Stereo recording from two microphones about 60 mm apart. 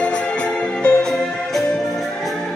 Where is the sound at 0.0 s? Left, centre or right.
Centre.